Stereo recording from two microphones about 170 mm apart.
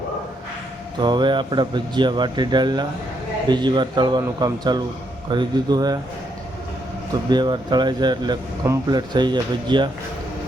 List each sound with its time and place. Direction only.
0.9 s speech: 25° right (ahead or behind)
7.3 s speech: 25° right (ahead or behind)